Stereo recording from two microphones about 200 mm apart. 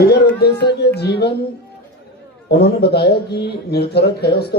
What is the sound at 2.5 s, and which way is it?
A man's voice, 55° left (ahead or behind).